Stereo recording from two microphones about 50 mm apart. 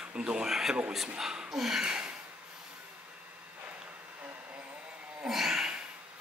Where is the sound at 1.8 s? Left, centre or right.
Centre.